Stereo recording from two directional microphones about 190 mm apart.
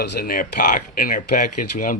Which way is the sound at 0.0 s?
55° left (ahead or behind).